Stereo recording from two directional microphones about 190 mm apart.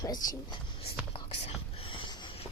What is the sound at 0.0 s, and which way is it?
Speech, 20° left (ahead or behind).